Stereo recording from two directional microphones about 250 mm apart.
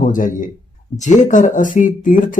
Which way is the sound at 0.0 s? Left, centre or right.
Left.